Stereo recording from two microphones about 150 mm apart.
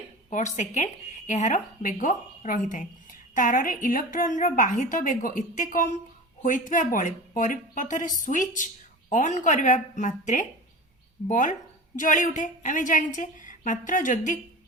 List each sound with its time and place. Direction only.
0.3 s a woman's voice: 55° left (ahead or behind)